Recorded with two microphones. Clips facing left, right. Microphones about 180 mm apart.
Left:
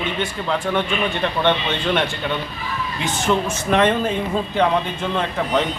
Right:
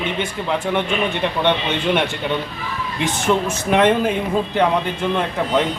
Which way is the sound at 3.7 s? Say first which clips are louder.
Right 2 dB; 15° right (ahead or behind).